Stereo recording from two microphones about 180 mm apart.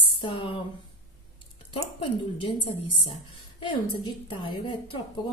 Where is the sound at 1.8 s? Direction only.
25° left (ahead or behind).